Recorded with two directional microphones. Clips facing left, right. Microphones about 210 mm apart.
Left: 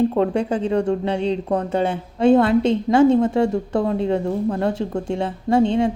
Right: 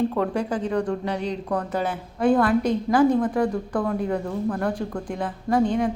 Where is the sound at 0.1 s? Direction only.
25° left (ahead or behind).